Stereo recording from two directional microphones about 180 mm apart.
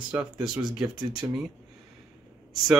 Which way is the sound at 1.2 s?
15° right (ahead or behind).